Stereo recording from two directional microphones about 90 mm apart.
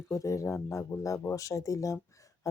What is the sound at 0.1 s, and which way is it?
Speech, 35° left (ahead or behind).